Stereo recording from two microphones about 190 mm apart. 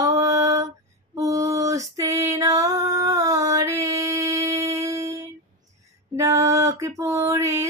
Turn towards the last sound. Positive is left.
turn(degrees=-15)  # may be behind; listen again after turning